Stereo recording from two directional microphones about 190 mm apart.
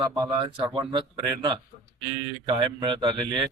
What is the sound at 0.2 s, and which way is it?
Speech, 25° right (ahead or behind).